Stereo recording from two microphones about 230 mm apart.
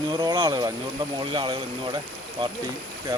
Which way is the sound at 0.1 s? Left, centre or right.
Centre.